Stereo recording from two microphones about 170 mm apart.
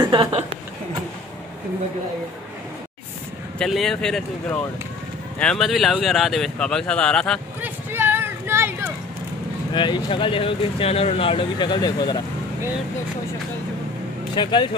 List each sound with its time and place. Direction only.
0.0 s speech: 30° right (ahead or behind)
3.5 s speech: centre (ahead or behind)
7.6 s a sound: 10° right (ahead or behind)
9.8 s speech: 25° left (ahead or behind)
14.3 s speech: 30° left (ahead or behind)